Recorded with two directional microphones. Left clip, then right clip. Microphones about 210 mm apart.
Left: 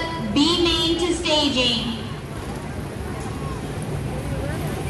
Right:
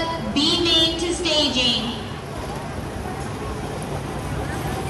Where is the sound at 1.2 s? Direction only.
20° left (ahead or behind).